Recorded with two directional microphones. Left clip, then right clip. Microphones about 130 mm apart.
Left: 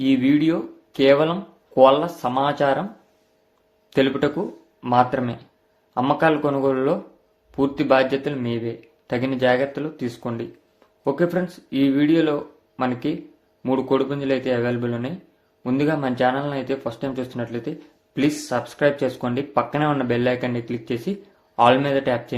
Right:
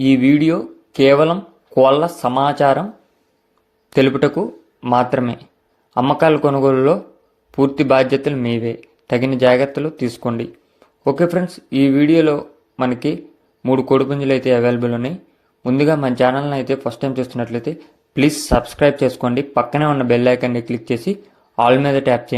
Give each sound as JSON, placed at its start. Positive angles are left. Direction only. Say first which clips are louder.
{"t": 0.0, "sound": "speech", "louder": "right 5 dB", "side_deg": -50}
{"t": 3.9, "sound": "a man's voice", "louder": "right 6 dB", "side_deg": -50}